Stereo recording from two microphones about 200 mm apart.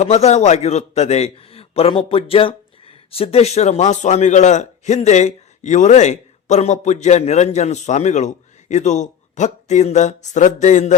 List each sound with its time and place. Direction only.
0.0 s a man's voice: 35° left (ahead or behind)